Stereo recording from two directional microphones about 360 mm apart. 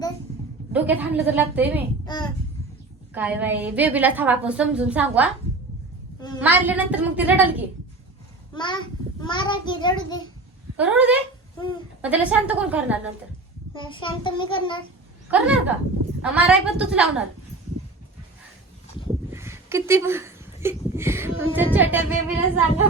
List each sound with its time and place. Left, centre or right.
0.7 s a woman's voice: centre
2.1 s a child's voice: centre
3.2 s a woman's voice: centre
6.1 s a woman's voice: centre
6.4 s a woman's voice: centre
8.5 s a child's voice: centre
10.8 s a woman's voice: centre
13.7 s a child's voice: centre
15.3 s a woman's voice: centre
19.3 s a woman's voice: centre